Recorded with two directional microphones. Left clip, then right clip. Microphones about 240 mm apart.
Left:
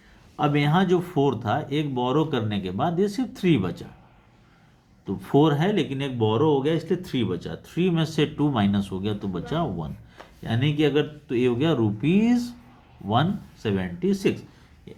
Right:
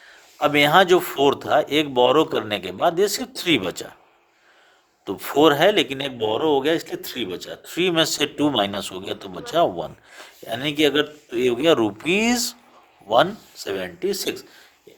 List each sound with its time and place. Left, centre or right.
0.3 s speech: right
5.0 s speech: right